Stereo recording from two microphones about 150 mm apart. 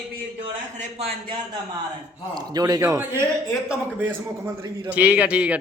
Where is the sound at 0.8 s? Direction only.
45° right (ahead or behind).